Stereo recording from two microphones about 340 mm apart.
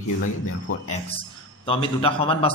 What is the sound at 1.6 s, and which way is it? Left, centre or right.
Speech, centre.